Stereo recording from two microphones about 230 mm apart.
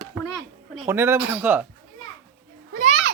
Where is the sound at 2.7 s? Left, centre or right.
Right.